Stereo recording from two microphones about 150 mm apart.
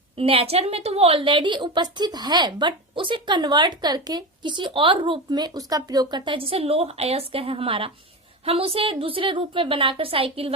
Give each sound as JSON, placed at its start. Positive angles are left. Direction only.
{"t": 0.2, "sound": "a woman's voice", "side_deg": -40}